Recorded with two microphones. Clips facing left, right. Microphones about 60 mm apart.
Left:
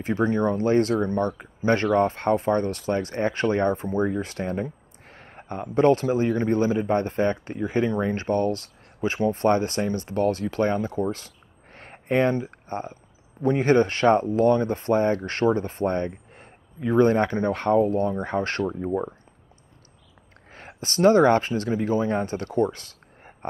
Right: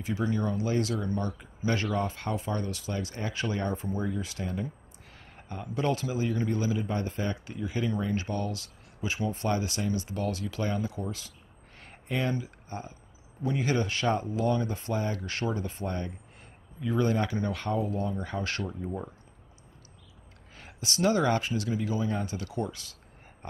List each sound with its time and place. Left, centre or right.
0.0 s a man's voice: left
4.6 s a sound: left
6.1 s a man's voice: left
20.5 s speech: left